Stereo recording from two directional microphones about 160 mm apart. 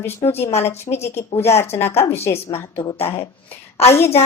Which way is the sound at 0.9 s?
40° left (ahead or behind).